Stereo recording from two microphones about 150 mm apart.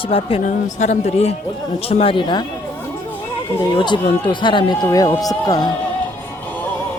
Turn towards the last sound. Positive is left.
turn(degrees=25)  # may be behind; listen again after turning